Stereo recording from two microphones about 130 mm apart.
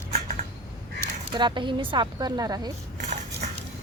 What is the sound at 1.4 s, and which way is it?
Speech, 35° right (ahead or behind).